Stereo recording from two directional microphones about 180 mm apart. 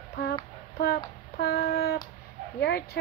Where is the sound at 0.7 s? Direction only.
60° left (ahead or behind).